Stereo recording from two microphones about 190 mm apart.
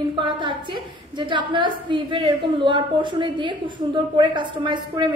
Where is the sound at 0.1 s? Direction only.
25° right (ahead or behind).